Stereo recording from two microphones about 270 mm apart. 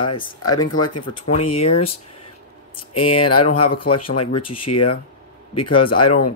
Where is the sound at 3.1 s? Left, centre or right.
Left.